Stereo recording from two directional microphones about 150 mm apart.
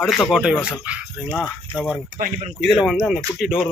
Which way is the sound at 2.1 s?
65° right (ahead or behind).